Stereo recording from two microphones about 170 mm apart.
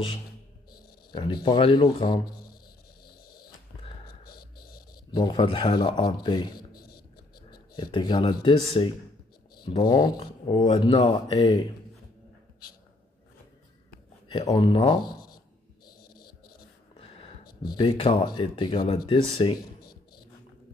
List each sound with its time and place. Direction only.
1.1 s speech: 30° left (ahead or behind)
3.3 s a sound: 25° left (ahead or behind)
4.2 s a sound: 60° left (ahead or behind)
5.1 s speech: 25° left (ahead or behind)
7.7 s speech: 25° left (ahead or behind)
14.3 s speech: 25° left (ahead or behind)
17.7 s speech: 30° left (ahead or behind)